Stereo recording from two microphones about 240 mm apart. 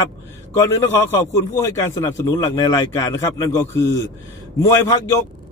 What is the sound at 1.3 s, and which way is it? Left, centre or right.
A man's voice, centre.